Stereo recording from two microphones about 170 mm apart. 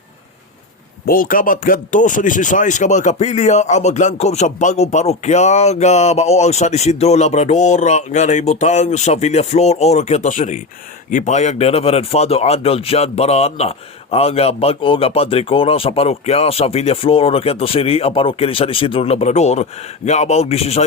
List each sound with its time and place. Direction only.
1.0 s speech: 55° left (ahead or behind); by 20.8 s 35° left (ahead or behind)